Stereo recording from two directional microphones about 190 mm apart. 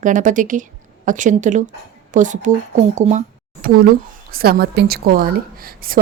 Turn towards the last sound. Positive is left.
turn(degrees=-50)  # may be behind; listen again after turning